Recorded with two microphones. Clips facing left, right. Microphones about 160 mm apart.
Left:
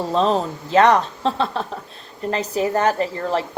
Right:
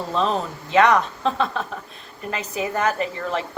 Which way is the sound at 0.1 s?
35° left (ahead or behind).